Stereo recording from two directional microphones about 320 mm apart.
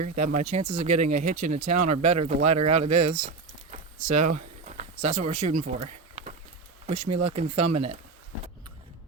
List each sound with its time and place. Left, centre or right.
0.3 s speech: right
1.7 s speech: right
2.6 s speech: centre
3.0 s a sound: centre
4.0 s speech: right
4.6 s a sound: right
6.8 s speech: centre